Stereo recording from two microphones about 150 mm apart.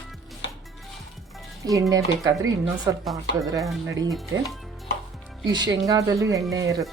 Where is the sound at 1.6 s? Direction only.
25° right (ahead or behind).